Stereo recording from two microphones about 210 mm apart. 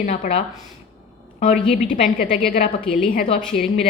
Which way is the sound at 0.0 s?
30° left (ahead or behind).